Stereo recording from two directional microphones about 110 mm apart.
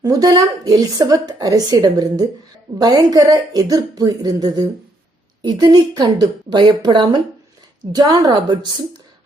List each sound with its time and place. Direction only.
0.0 s a woman's voice: 35° right (ahead or behind)